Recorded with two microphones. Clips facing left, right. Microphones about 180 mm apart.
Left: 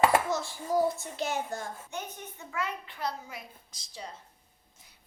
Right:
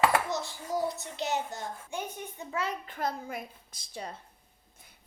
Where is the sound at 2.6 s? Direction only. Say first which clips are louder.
Right 2 dB; 45° right (ahead or behind).